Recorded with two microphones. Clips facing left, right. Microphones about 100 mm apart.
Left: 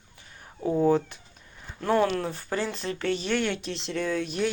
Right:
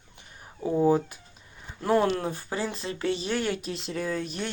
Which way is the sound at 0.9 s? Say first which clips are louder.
Even; 10° right (ahead or behind).